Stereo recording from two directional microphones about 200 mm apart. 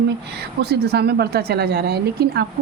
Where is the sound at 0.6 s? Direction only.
55° right (ahead or behind).